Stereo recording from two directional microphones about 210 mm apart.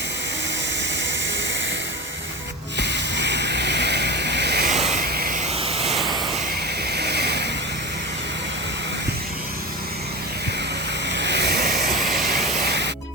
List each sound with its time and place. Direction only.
2.7 s a sound: 55° right (ahead or behind)
4.7 s a sound: 35° right (ahead or behind)
5.0 s vehicle: 45° right (ahead or behind)
5.6 s vehicle: 30° right (ahead or behind)
6.9 s waves: 50° right (ahead or behind)
11.2 s vehicle: 55° right (ahead or behind)
11.9 s vehicle: centre (ahead or behind)
12.6 s music: 55° right (ahead or behind)